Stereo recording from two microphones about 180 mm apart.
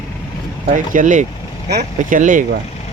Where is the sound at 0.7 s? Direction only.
45° right (ahead or behind).